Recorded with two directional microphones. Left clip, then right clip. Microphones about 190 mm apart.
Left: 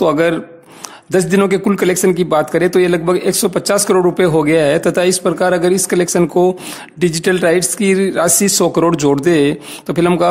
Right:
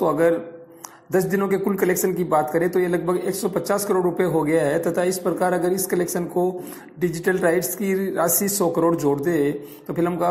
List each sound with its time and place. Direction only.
0.0 s speech: 30° left (ahead or behind)
1.5 s speech: 30° left (ahead or behind)